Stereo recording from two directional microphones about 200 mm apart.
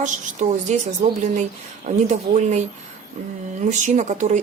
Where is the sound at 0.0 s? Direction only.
35° right (ahead or behind).